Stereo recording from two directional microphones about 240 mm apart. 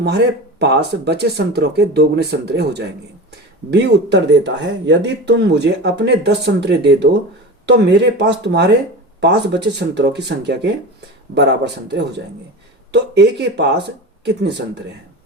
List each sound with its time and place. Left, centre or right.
0.6 s speech: right